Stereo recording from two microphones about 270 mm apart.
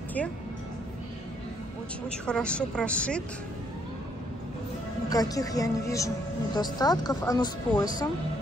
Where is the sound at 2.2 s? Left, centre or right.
Centre.